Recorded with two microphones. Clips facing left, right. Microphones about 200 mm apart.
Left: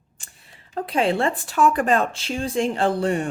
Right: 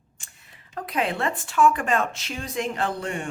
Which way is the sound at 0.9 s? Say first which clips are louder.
Left 5 dB; 30° left (ahead or behind).